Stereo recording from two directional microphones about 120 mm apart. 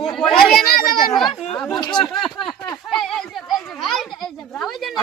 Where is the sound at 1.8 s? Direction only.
40° left (ahead or behind).